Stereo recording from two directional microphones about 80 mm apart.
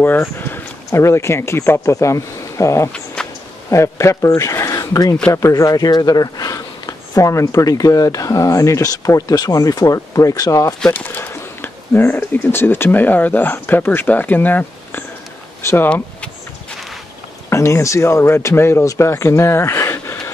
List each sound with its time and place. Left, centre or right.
0.0 s speech: left
0.8 s speech: left
3.2 s a sound: centre
3.7 s a man's voice: left
10.9 s speech: left
15.6 s speech: left
17.5 s speech: left